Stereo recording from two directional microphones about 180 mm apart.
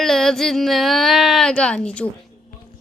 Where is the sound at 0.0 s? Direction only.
Centre (ahead or behind).